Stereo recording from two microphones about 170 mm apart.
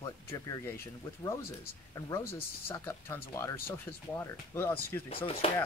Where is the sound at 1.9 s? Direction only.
20° left (ahead or behind).